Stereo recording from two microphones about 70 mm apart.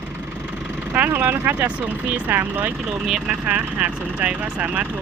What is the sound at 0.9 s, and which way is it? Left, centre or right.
Speech, right.